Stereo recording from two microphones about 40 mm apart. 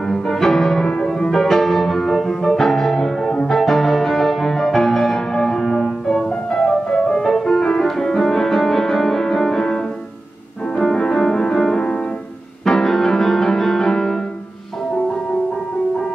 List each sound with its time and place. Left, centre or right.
0.0 s music: centre
11.0 s music: centre